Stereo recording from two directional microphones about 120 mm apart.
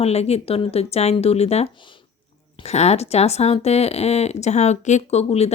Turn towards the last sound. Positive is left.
turn(degrees=60)  # may be behind; listen again after turning